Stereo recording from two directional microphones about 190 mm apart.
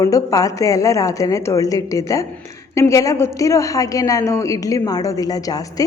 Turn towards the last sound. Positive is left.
turn(degrees=20)  # may be behind; listen again after turning